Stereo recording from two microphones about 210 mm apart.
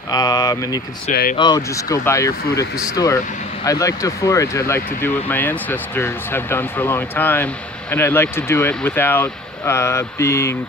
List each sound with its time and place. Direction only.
0.1 s speech: 20° left (ahead or behind)